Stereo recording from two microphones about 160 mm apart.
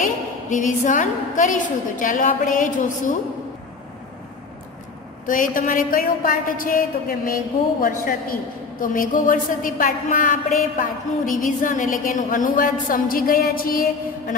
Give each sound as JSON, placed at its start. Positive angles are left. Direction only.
{"t": 0.5, "sound": "a woman's voice", "side_deg": 50}
{"t": 5.2, "sound": "a woman's voice", "side_deg": 55}